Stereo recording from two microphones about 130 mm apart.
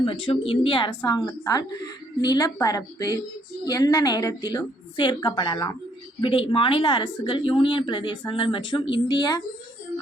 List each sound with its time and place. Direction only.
0.0 s a woman's voice: 45° left (ahead or behind)